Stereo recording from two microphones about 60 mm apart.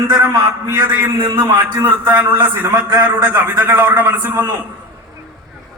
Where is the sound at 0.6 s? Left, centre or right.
Right.